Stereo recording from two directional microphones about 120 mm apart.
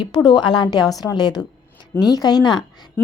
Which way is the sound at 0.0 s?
35° left (ahead or behind).